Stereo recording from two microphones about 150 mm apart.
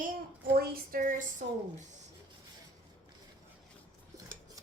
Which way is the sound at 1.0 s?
60° right (ahead or behind).